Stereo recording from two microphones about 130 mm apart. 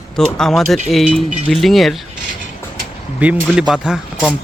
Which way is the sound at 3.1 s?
10° right (ahead or behind).